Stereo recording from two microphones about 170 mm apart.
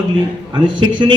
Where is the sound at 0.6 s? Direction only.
25° right (ahead or behind).